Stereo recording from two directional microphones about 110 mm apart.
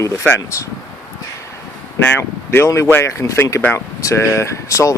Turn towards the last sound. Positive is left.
turn(degrees=30)  # may be behind; listen again after turning